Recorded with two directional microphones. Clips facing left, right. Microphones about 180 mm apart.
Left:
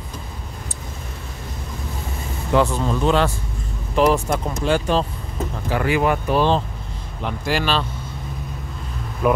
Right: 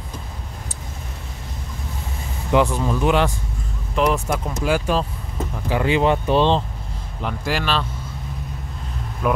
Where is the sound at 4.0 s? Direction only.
Centre (ahead or behind).